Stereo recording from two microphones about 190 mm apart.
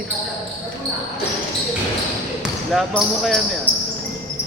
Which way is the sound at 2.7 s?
Centre (ahead or behind).